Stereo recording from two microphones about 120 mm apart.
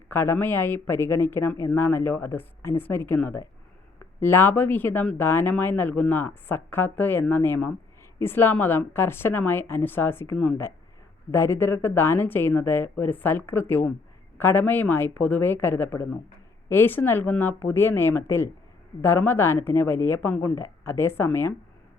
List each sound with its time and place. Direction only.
0.1 s speech: 20° left (ahead or behind)